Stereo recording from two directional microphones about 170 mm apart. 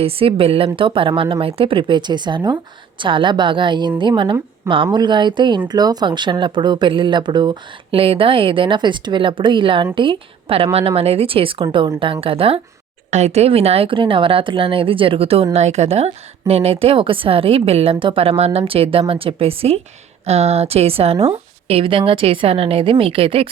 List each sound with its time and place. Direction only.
0.0 s speech: 35° right (ahead or behind)